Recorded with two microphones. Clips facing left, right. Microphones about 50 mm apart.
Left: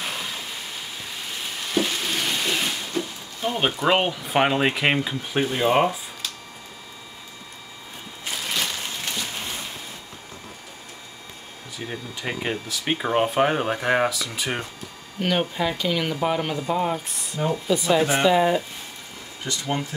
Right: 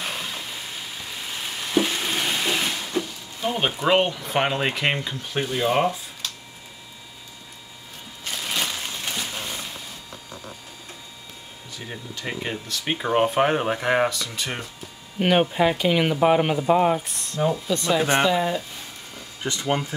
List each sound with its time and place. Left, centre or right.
0.0 s a sound: centre
3.8 s speech: centre
8.3 s a sound: centre
11.8 s speech: centre
15.1 s speech: right
17.0 s speech: centre
19.4 s speech: right